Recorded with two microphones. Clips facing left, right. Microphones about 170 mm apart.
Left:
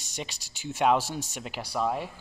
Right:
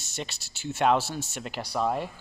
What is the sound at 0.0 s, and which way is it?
Speech, 10° left (ahead or behind).